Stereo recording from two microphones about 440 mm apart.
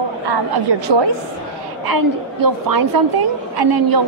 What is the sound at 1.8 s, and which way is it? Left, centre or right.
A woman's voice, right.